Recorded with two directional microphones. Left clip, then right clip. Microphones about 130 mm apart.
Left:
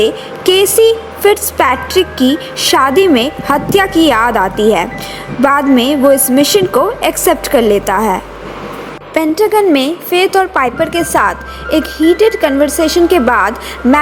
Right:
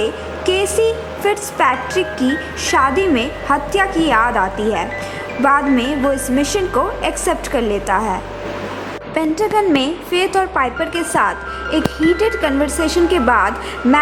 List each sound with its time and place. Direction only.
0.0 s a woman's voice: 40° left (ahead or behind)
9.1 s a woman's voice: 30° left (ahead or behind)
13.8 s speech: 15° left (ahead or behind)